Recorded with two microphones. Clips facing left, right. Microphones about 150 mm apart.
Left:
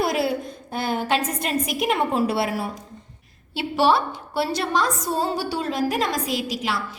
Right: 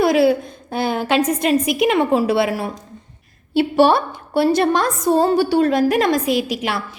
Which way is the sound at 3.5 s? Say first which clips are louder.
Right 6 dB; 50° right (ahead or behind).